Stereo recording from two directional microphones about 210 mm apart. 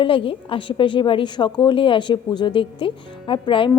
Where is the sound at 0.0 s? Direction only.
25° left (ahead or behind).